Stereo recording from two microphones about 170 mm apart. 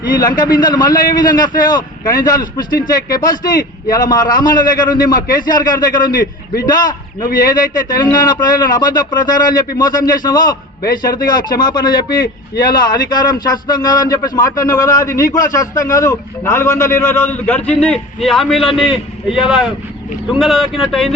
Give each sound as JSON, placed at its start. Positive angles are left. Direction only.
{"t": 0.1, "sound": "a man's voice", "side_deg": 25}
{"t": 6.1, "sound": "a man's voice", "side_deg": 60}
{"t": 6.6, "sound": "a man's voice", "side_deg": 25}